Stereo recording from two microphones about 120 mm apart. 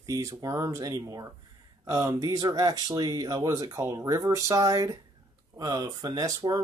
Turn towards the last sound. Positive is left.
turn(degrees=-30)  # may be behind; listen again after turning